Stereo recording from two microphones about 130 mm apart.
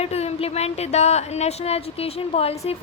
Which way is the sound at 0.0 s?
55° left (ahead or behind).